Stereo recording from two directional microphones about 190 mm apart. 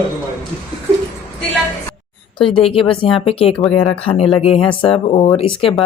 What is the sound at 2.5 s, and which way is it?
Speech, 30° left (ahead or behind).